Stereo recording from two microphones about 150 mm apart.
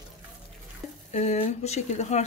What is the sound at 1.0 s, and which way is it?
Speech, 45° left (ahead or behind).